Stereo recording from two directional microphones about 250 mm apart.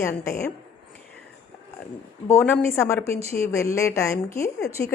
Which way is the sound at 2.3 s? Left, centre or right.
Centre.